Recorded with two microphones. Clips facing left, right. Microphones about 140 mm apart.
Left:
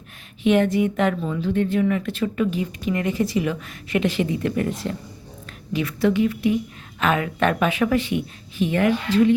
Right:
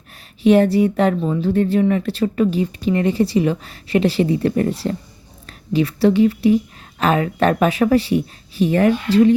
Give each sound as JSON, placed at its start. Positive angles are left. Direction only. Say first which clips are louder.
{"t": 0.4, "sound": "a woman's voice", "louder": "right 5 dB", "side_deg": -35}